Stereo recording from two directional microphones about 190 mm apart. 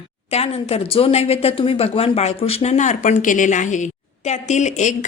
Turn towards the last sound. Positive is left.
turn(degrees=40)  # may be behind; listen again after turning